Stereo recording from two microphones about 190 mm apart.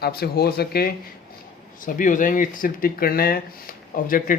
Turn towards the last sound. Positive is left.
turn(degrees=45)  # may be behind; listen again after turning